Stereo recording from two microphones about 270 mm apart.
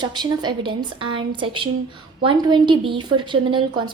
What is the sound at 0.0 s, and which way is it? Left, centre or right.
A woman's voice, centre.